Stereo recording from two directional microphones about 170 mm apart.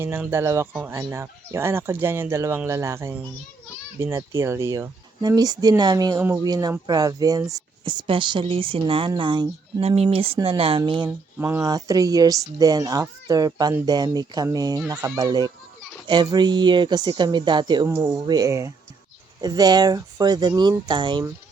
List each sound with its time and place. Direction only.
0.0 s speech: 15° right (ahead or behind)
11.3 s speech: 15° right (ahead or behind)